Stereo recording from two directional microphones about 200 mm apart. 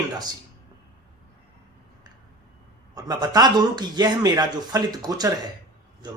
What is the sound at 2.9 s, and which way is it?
Speech, 20° right (ahead or behind).